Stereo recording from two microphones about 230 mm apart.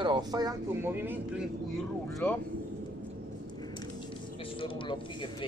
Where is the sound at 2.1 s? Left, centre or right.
Centre.